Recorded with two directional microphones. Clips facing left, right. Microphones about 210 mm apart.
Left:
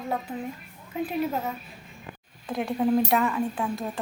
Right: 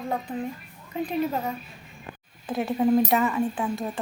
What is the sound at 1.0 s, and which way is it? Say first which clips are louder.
Speech: right 1 dB; 5° left (ahead or behind).